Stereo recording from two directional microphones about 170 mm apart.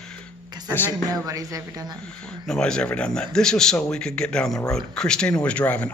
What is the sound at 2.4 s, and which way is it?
Speech, 5° left (ahead or behind).